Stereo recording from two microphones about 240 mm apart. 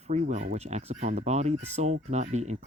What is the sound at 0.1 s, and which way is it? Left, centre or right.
Speech, right.